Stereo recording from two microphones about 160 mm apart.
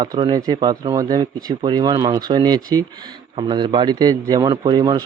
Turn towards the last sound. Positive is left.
turn(degrees=-25)  # may be behind; listen again after turning